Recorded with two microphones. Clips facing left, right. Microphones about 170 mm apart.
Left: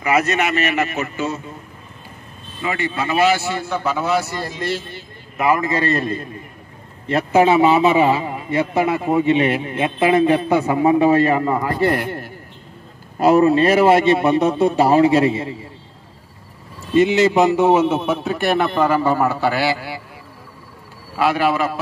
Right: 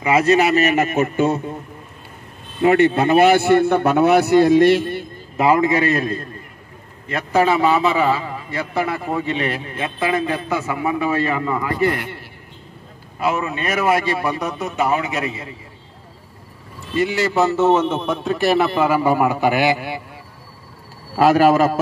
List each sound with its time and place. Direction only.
0.0 s a man's voice: 30° right (ahead or behind); by 1.4 s 55° right (ahead or behind)
2.6 s a man's voice: 60° right (ahead or behind)
5.4 s a man's voice: 20° right (ahead or behind)
7.1 s a man's voice: 30° left (ahead or behind)
7.4 s a man's voice: 20° left (ahead or behind)
13.2 s a man's voice: 35° left (ahead or behind)
16.9 s a man's voice: 20° left (ahead or behind); by 20.0 s 20° right (ahead or behind)
21.2 s a man's voice: 40° right (ahead or behind)